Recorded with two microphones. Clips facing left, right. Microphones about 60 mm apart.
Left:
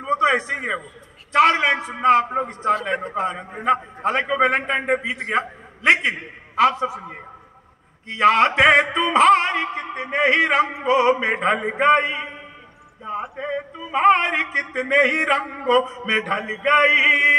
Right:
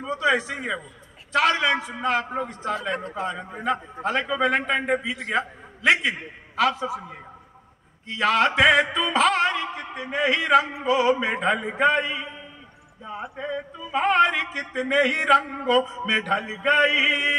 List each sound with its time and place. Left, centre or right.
0.1 s a sound: left
1.3 s speech: left
2.4 s a man's voice: left
2.9 s a man's voice: left
3.4 s speech: left
6.7 s a man's voice: left
8.2 s speech: left
9.1 s music: left
9.6 s a man's voice: left
13.0 s a sound: left
13.4 s speech: left